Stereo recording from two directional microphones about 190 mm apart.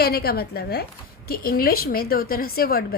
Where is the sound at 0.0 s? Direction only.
55° left (ahead or behind).